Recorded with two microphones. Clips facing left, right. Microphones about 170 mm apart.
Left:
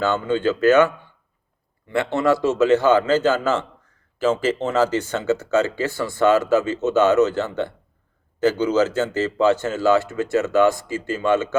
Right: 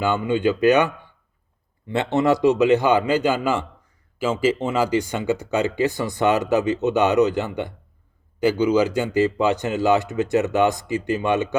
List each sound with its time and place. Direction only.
0.0 s a man's voice: 10° right (ahead or behind)